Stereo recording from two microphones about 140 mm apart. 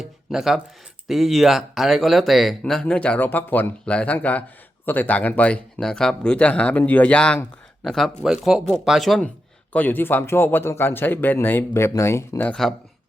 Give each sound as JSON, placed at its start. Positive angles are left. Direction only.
{"t": 0.0, "sound": "a man's voice", "side_deg": -5}
{"t": 9.7, "sound": "a man's voice", "side_deg": 15}